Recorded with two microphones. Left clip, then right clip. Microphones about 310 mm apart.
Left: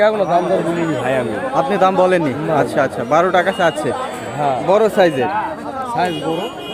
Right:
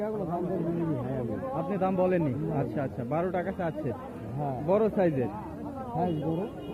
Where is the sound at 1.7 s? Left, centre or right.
Centre.